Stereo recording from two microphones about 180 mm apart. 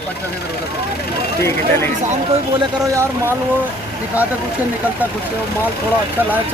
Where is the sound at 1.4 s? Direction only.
15° left (ahead or behind).